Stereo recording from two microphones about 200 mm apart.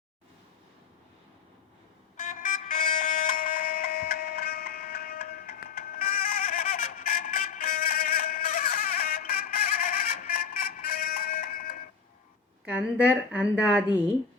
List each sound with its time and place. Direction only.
2.1 s vehicle: 40° left (ahead or behind)
5.6 s a sound: 45° left (ahead or behind)
12.6 s a woman's voice: 5° right (ahead or behind)